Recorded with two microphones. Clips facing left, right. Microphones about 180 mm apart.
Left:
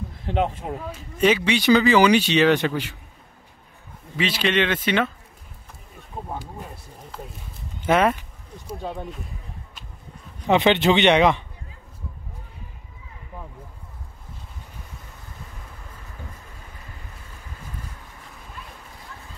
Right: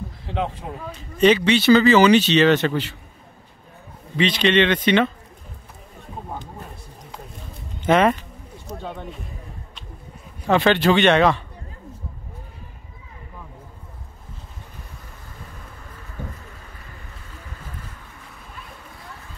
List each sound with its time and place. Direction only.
0.9 s speech: 5° left (ahead or behind)
4.2 s speech: 5° left (ahead or behind)
7.8 s a sound: 5° left (ahead or behind)
10.4 s a man's voice: 20° left (ahead or behind)